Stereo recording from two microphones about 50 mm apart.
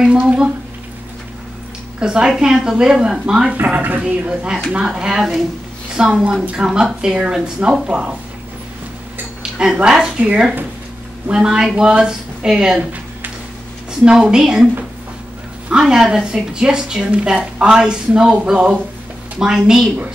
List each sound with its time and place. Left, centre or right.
0.0 s a sound: centre
2.0 s a woman's voice: centre
3.6 s a woman's voice: right
4.3 s a woman's voice: centre
9.4 s a sound: centre
9.8 s a woman's voice: centre
11.4 s a woman's voice: centre
14.0 s a woman's voice: centre
15.8 s a woman's voice: centre